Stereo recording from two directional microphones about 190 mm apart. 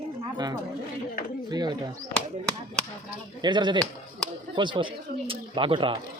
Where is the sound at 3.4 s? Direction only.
25° right (ahead or behind).